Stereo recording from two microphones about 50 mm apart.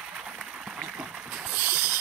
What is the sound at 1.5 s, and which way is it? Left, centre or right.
Owl, right.